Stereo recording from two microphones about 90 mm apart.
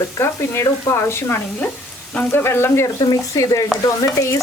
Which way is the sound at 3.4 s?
40° left (ahead or behind).